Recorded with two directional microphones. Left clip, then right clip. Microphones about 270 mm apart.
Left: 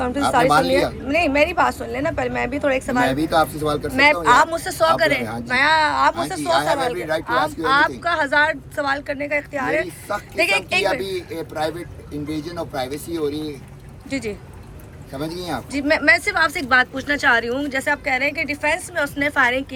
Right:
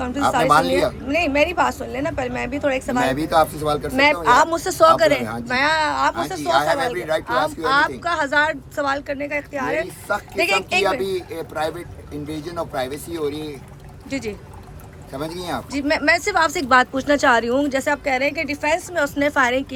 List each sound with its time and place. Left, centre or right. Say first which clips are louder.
0.0 s a woman's voice: left 1 dB; centre
10.8 s a woman's voice: right 1 dB; centre